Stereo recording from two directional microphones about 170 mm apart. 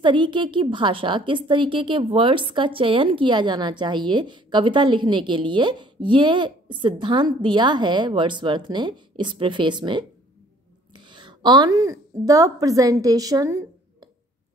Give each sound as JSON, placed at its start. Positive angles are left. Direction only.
{"t": 0.0, "sound": "a woman's voice", "side_deg": -30}